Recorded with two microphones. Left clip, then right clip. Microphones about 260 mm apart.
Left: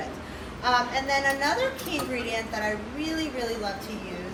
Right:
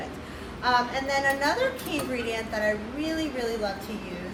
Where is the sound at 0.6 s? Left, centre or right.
Centre.